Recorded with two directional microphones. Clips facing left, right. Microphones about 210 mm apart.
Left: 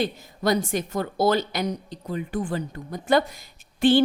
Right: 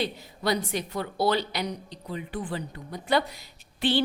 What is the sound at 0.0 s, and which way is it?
A woman's voice, 45° left (ahead or behind).